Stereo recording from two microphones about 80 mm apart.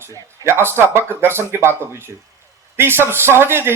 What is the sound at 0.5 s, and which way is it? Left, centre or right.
A man's voice, right.